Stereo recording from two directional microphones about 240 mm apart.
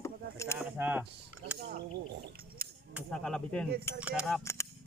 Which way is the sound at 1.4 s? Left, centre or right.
Right.